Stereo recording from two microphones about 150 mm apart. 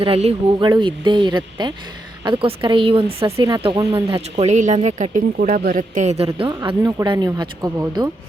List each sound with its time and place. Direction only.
0.0 s speech: 40° right (ahead or behind)
3.2 s speech: 20° right (ahead or behind)
4.1 s speech: 45° right (ahead or behind)
6.3 s speech: 35° right (ahead or behind)